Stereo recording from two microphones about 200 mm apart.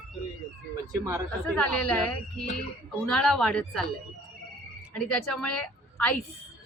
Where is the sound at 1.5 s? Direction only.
5° left (ahead or behind).